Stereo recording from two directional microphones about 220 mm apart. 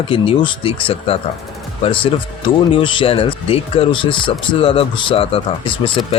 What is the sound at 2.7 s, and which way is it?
Speech, 20° left (ahead or behind).